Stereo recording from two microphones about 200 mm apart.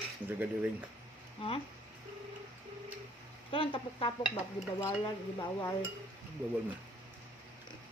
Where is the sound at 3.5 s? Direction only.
25° left (ahead or behind).